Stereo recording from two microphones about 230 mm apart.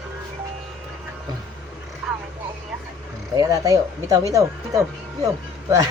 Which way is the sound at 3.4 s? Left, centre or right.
Centre.